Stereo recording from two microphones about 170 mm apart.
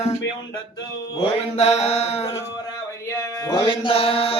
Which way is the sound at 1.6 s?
40° left (ahead or behind).